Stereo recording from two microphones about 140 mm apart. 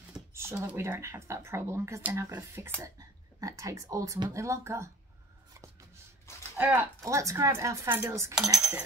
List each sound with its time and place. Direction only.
0.3 s speech: 20° right (ahead or behind)
6.6 s speech: 15° right (ahead or behind)
8.5 s speech: 5° right (ahead or behind)